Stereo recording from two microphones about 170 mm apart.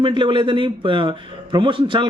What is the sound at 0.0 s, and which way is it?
Speech, 30° right (ahead or behind).